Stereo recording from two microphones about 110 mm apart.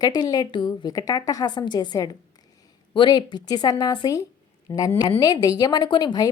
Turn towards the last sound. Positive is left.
turn(degrees=40)  # may be behind; listen again after turning